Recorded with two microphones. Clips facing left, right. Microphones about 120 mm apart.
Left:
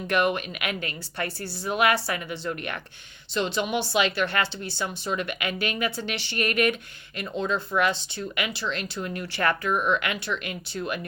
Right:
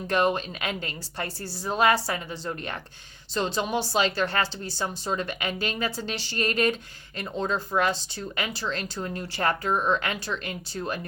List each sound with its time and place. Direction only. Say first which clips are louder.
0.1 s a woman's voice: even; 30° right (ahead or behind)